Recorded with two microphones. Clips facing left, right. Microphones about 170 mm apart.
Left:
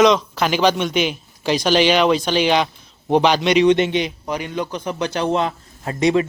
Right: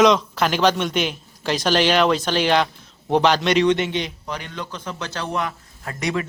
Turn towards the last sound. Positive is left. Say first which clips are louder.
# left 8 dB
turn(degrees=25)  # may be behind; listen again after turning